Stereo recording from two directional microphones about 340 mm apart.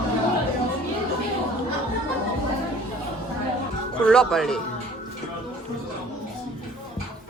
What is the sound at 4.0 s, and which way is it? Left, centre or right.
Speech, centre.